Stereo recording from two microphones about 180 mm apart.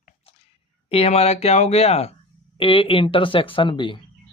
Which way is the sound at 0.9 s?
35° left (ahead or behind).